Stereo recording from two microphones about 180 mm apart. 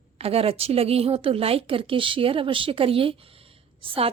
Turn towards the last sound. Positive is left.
turn(degrees=-30)  # may be behind; listen again after turning